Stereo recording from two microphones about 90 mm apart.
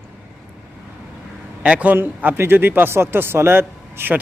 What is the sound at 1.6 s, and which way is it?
A man's voice, 15° right (ahead or behind).